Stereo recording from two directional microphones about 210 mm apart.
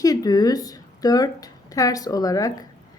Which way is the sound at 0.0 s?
15° left (ahead or behind).